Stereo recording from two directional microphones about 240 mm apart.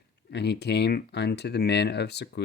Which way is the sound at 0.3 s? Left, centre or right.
Left.